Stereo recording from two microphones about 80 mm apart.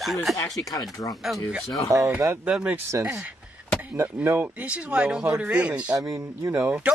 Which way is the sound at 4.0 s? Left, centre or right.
Right.